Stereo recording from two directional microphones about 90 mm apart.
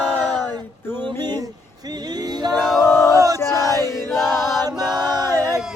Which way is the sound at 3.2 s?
40° right (ahead or behind).